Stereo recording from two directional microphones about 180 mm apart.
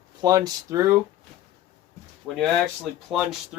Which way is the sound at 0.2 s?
20° right (ahead or behind).